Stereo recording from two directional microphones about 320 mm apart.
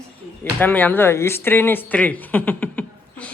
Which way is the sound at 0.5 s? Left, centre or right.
Centre.